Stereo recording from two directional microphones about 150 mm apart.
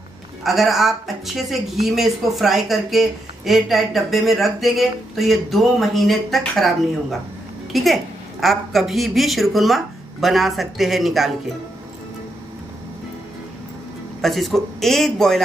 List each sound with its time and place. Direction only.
0.4 s speech: centre (ahead or behind)
14.2 s speech: centre (ahead or behind)